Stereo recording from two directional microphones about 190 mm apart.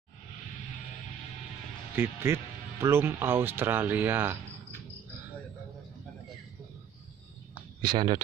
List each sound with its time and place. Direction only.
2.0 s speech: 15° right (ahead or behind)
7.8 s speech: 25° right (ahead or behind)